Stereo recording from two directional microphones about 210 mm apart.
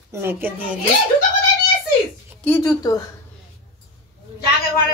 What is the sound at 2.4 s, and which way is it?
Speech, 15° left (ahead or behind).